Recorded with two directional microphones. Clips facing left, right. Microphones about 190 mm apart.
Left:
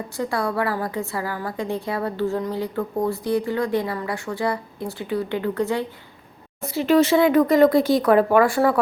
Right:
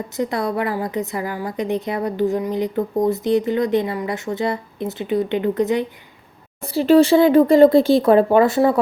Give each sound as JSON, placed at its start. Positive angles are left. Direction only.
{"t": 0.2, "sound": "a woman's voice", "side_deg": -20}
{"t": 6.6, "sound": "a woman's voice", "side_deg": -30}